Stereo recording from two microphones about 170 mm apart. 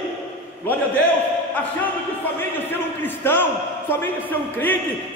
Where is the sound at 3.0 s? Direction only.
10° left (ahead or behind).